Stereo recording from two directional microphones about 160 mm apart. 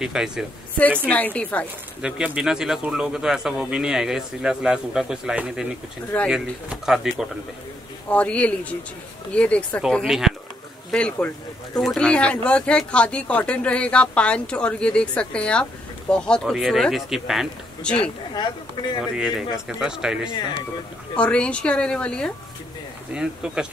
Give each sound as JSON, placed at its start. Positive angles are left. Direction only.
{"t": 0.0, "sound": "speech", "side_deg": -5}
{"t": 1.0, "sound": "speech", "side_deg": 10}
{"t": 2.0, "sound": "speech", "side_deg": -5}
{"t": 8.1, "sound": "speech", "side_deg": 10}
{"t": 18.3, "sound": "speech", "side_deg": 25}
{"t": 19.1, "sound": "speech", "side_deg": -5}
{"t": 21.2, "sound": "speech", "side_deg": 5}
{"t": 23.1, "sound": "speech", "side_deg": -5}